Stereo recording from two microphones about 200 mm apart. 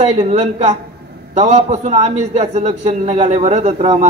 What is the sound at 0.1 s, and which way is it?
A man's voice, 30° right (ahead or behind).